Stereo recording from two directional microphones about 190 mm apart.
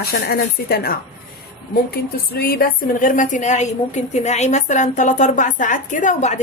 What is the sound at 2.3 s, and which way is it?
A woman's voice, 50° left (ahead or behind).